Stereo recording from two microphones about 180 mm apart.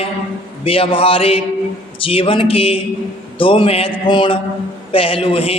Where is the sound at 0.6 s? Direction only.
30° left (ahead or behind).